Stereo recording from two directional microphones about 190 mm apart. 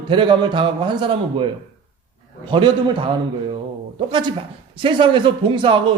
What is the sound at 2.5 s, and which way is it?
Speech, 25° right (ahead or behind).